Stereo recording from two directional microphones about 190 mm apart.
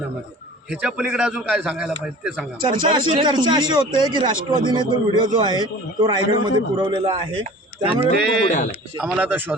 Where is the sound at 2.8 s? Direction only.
25° right (ahead or behind).